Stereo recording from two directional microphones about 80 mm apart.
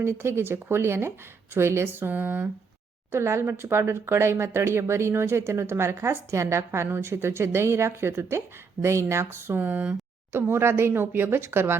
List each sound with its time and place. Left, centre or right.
0.0 s speech: right
3.1 s speech: right